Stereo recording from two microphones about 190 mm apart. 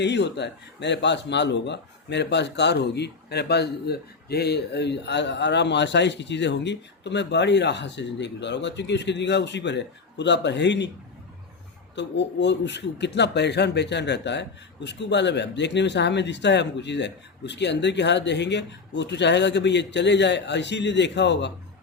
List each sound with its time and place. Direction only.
0.0 s speech: 65° left (ahead or behind)
11.9 s speech: 65° left (ahead or behind)